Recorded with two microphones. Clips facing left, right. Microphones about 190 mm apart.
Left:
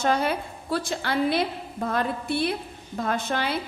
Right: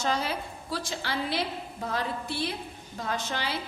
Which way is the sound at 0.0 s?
55° left (ahead or behind).